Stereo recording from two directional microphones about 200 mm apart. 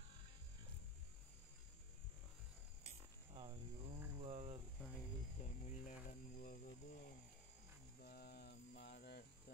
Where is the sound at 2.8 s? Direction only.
30° right (ahead or behind).